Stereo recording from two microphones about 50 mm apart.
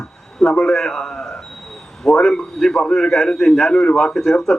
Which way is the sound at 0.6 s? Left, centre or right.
Centre.